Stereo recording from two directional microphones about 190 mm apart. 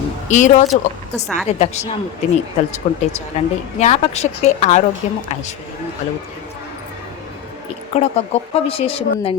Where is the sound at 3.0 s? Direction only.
35° left (ahead or behind).